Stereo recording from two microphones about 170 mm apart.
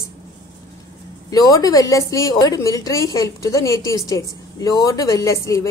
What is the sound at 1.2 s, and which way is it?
A woman's voice, 20° left (ahead or behind).